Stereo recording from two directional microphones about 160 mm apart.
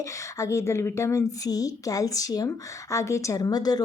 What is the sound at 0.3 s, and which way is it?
A woman's voice, 20° left (ahead or behind).